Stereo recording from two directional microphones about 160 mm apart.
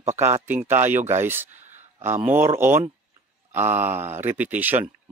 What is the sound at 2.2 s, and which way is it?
Speech, 15° right (ahead or behind).